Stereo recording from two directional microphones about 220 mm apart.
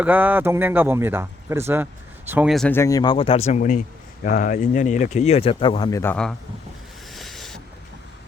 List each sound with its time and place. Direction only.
0.0 s speech: 5° right (ahead or behind)
7.1 s boat: centre (ahead or behind)